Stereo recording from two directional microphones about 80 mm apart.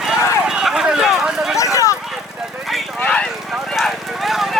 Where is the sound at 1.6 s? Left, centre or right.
Left.